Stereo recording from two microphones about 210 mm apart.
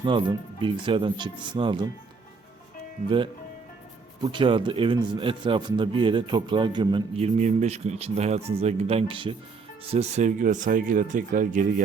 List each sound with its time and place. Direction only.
0.0 s speech: 20° right (ahead or behind)
4.2 s speech: 20° right (ahead or behind); by 11.6 s 40° right (ahead or behind)